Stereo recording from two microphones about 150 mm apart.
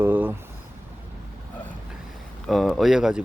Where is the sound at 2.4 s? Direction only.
Centre (ahead or behind).